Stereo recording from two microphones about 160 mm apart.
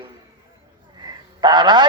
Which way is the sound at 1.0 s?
25° right (ahead or behind).